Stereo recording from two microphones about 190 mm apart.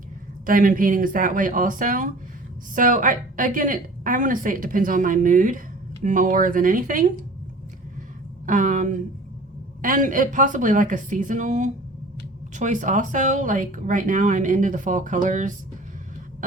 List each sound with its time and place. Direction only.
0.4 s a woman's voice: 45° right (ahead or behind)
8.4 s a woman's voice: 45° right (ahead or behind)